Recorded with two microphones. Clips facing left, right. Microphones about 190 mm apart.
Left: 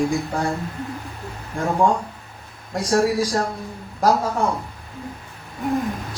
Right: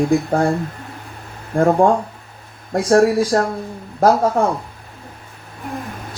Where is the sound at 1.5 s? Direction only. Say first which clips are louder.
Right 6 dB; 55° right (ahead or behind).